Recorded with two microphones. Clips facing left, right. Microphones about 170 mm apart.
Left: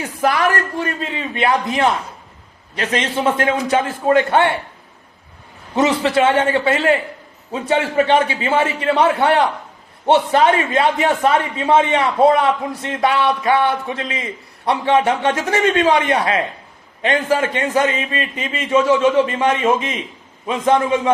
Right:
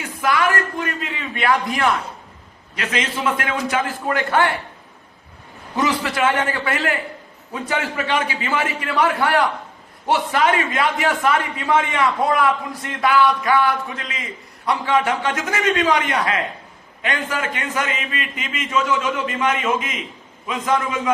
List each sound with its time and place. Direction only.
0.0 s a man's voice: 35° left (ahead or behind)
5.7 s a man's voice: 25° left (ahead or behind)